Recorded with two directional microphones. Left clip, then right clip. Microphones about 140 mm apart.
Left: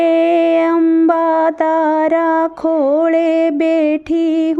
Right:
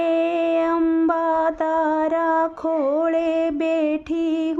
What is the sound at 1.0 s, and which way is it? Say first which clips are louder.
Music: left 7 dB; 30° left (ahead or behind).